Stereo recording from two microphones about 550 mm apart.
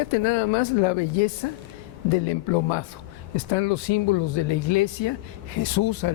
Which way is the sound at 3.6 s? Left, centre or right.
Left.